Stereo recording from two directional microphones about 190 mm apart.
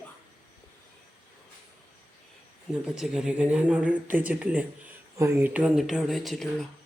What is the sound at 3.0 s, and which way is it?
Speech, 5° right (ahead or behind).